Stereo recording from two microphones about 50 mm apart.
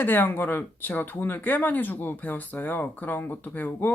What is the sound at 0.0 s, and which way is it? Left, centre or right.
Speech, left.